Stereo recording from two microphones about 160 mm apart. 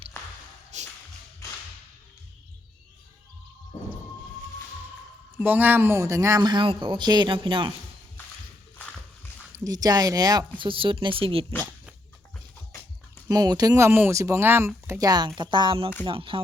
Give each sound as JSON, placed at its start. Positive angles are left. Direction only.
{"t": 0.7, "sound": "music", "side_deg": -45}
{"t": 5.4, "sound": "speech", "side_deg": -10}
{"t": 9.6, "sound": "speech", "side_deg": -25}
{"t": 13.2, "sound": "speech", "side_deg": -25}